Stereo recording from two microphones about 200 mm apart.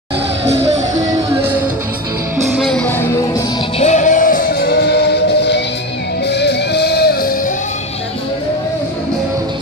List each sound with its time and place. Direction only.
0.9 s music: 15° right (ahead or behind)
2.6 s music: 5° left (ahead or behind)
3.8 s music: 40° left (ahead or behind)